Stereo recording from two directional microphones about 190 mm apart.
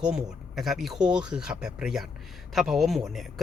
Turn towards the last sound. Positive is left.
turn(degrees=0)  # may be behind; listen again after turning